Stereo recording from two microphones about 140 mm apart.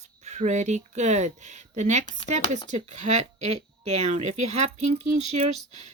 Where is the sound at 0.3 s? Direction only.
55° right (ahead or behind).